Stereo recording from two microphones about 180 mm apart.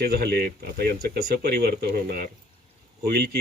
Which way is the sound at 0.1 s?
60° right (ahead or behind).